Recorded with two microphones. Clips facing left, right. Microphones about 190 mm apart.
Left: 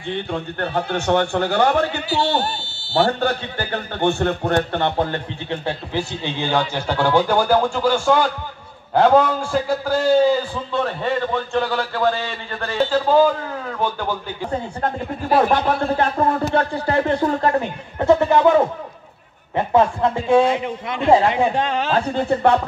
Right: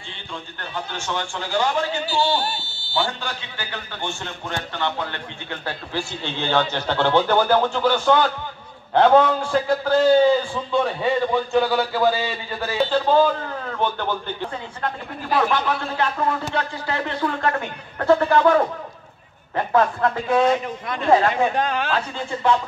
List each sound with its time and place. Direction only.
0.1 s a man's voice: 60° left (ahead or behind)
5.5 s a man's voice: 25° left (ahead or behind)
6.2 s a man's voice: 15° left (ahead or behind)
14.5 s speech: 45° left (ahead or behind)
17.9 s a man's voice: 20° left (ahead or behind)
22.2 s a man's voice: 60° left (ahead or behind)